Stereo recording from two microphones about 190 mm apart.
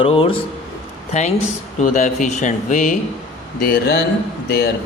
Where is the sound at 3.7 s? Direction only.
60° left (ahead or behind).